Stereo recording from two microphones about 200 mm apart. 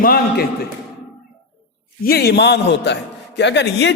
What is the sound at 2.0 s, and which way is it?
A man's voice, 50° left (ahead or behind).